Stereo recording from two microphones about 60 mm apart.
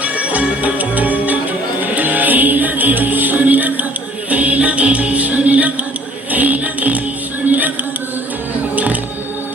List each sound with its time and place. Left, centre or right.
0.0 s music: right
7.4 s a sound: right
8.7 s music: right